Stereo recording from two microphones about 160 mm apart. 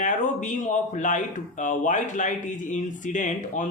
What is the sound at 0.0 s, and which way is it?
Speech, 50° left (ahead or behind).